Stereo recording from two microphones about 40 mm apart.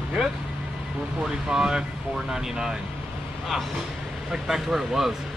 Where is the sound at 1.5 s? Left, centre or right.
Centre.